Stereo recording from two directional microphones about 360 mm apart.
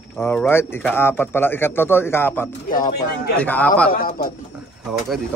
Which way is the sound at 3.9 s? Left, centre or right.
Left.